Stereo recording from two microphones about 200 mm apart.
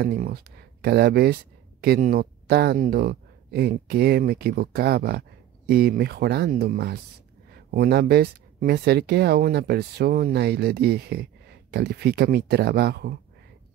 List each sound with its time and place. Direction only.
0.0 s speech: 50° right (ahead or behind)